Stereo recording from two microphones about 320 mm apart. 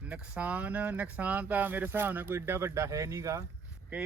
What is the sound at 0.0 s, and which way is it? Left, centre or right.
Speech, centre.